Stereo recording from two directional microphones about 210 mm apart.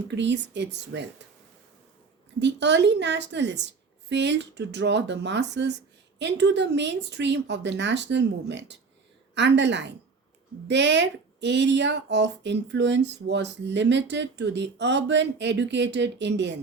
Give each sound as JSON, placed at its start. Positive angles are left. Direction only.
{"t": 0.1, "sound": "speech", "side_deg": -55}
{"t": 2.4, "sound": "speech", "side_deg": -55}